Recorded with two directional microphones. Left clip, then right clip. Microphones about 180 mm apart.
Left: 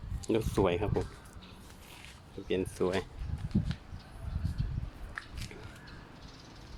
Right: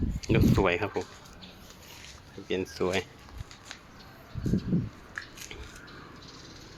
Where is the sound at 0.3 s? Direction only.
15° left (ahead or behind).